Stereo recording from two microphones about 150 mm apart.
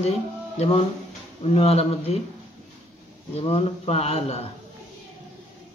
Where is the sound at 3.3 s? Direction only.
40° left (ahead or behind).